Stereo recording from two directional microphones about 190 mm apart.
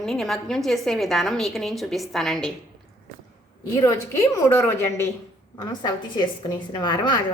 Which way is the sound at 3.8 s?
15° left (ahead or behind).